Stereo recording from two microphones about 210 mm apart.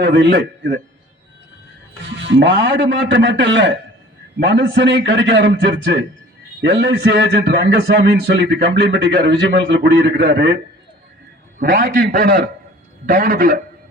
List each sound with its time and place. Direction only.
0.0 s a man's voice: 55° right (ahead or behind)
2.1 s a man's voice: 60° right (ahead or behind)
11.7 s a man's voice: 55° right (ahead or behind)